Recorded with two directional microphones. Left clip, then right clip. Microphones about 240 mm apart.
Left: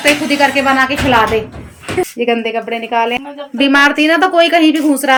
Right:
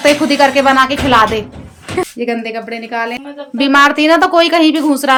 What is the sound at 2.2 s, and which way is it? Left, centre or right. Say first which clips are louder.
A woman's voice: left 4 dB; centre.